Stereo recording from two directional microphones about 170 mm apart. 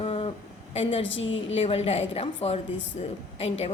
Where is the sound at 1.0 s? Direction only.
90° left.